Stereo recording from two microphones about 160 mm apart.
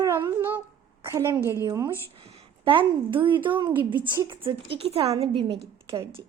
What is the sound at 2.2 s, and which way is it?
A woman's voice, 35° right (ahead or behind).